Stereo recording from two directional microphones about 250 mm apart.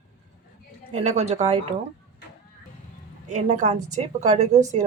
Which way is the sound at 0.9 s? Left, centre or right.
Right.